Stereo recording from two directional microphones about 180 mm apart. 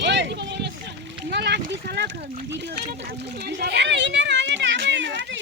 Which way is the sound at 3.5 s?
70° right (ahead or behind).